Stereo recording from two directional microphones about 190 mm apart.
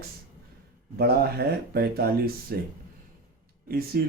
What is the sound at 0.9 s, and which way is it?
Speech, 55° right (ahead or behind).